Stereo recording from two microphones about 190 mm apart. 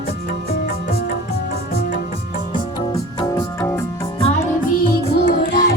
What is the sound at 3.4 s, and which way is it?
Organ, 15° left (ahead or behind).